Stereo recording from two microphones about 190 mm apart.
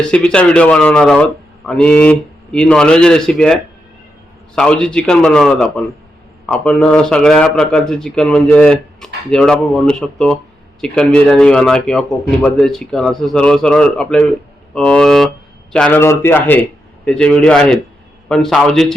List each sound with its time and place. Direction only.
0.1 s a man's voice: 5° left (ahead or behind)